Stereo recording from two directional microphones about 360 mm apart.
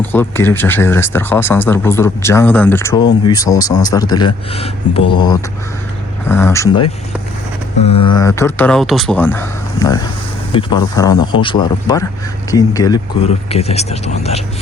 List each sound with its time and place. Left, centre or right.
0.1 s speech: centre